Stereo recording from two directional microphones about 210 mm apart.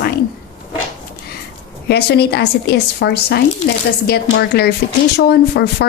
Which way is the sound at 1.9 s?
50° left (ahead or behind).